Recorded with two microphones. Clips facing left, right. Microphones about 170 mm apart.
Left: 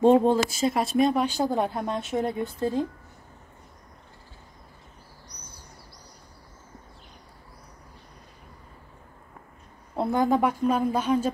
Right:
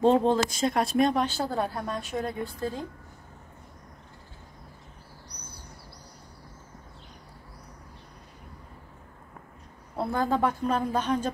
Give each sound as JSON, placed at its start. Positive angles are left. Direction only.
{"t": 0.0, "sound": "a woman's voice", "side_deg": 10}
{"t": 1.2, "sound": "a woman's voice", "side_deg": 15}
{"t": 9.9, "sound": "a woman's voice", "side_deg": 20}